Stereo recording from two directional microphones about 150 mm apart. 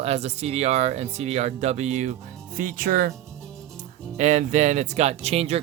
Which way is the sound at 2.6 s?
65° right (ahead or behind).